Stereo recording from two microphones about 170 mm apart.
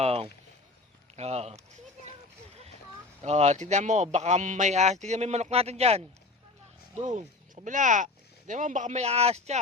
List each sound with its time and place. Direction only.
0.0 s a sound: 35° right (ahead or behind)
1.1 s speech: 40° right (ahead or behind)
3.2 s a man's voice: 40° right (ahead or behind)